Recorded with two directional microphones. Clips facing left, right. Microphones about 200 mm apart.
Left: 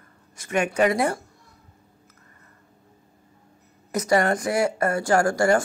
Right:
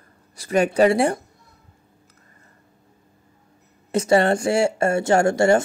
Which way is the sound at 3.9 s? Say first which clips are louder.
Right 4 dB; 30° right (ahead or behind).